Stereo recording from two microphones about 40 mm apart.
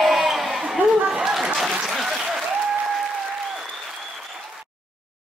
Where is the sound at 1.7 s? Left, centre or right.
Centre.